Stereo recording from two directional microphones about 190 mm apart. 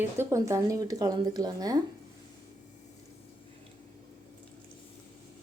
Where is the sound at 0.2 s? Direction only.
15° right (ahead or behind).